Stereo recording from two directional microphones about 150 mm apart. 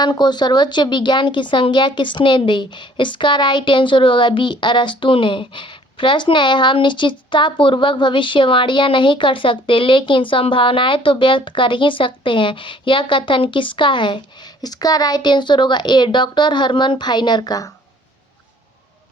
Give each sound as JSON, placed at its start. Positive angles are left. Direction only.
{"t": 0.0, "sound": "a woman's voice", "side_deg": 30}